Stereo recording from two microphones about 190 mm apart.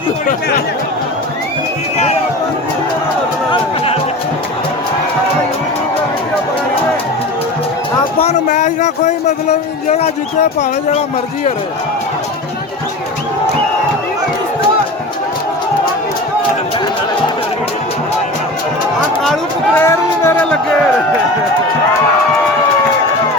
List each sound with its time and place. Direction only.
8.2 s speech: 35° left (ahead or behind)
19.8 s speech: 15° left (ahead or behind)